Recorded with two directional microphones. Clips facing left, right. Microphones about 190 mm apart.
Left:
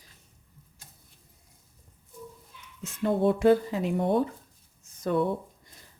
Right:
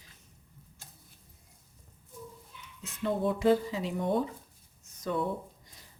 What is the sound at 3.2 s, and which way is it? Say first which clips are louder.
Speech: left 5 dB; 60° left (ahead or behind).